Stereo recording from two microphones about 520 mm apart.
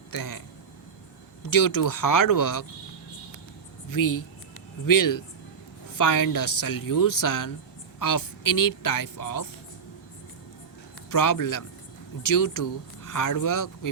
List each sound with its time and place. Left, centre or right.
0.1 s speech: left
3.8 s speech: left
11.1 s speech: left